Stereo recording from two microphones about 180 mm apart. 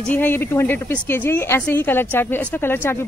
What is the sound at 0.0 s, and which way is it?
A woman's voice, 10° left (ahead or behind).